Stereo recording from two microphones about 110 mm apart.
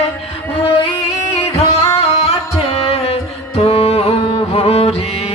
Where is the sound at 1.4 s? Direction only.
65° left (ahead or behind).